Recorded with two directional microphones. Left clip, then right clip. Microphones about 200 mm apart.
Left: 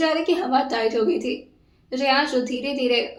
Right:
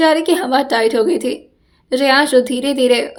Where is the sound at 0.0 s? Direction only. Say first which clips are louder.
Right 8 dB; 60° right (ahead or behind).